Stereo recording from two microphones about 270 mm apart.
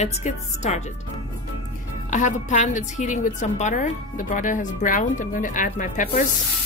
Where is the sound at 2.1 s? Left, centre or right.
Left.